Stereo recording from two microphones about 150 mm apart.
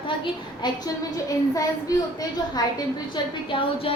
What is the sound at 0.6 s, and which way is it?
Speech, 30° left (ahead or behind).